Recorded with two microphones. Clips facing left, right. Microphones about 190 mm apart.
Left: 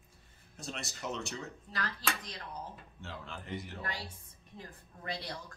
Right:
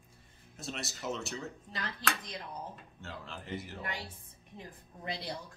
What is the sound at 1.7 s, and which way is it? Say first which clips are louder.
Speech: even; 20° right (ahead or behind).